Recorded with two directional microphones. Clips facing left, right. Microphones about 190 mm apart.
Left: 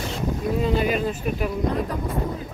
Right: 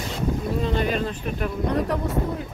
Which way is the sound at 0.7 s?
10° left (ahead or behind).